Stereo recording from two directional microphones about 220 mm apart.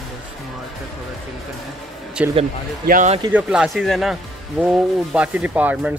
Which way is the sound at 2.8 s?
35° right (ahead or behind).